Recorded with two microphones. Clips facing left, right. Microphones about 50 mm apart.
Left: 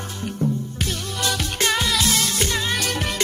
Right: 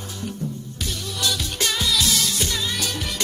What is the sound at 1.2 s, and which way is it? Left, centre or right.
Music, left.